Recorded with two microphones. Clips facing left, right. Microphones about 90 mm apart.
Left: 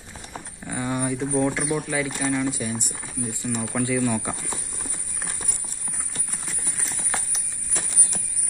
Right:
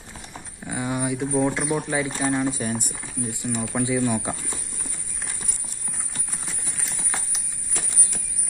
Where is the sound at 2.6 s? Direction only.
50° right (ahead or behind).